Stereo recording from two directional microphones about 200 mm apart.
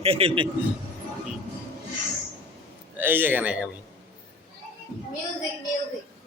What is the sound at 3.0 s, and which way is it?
Speech, 10° right (ahead or behind).